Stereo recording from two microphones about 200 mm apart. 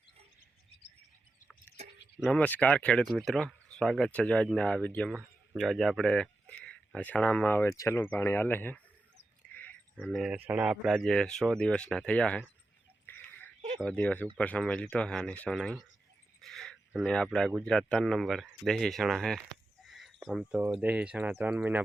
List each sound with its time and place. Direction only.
2.1 s speech: 5° left (ahead or behind)
10.0 s speech: centre (ahead or behind)
13.1 s a sound: 10° left (ahead or behind)
13.7 s speech: 5° left (ahead or behind)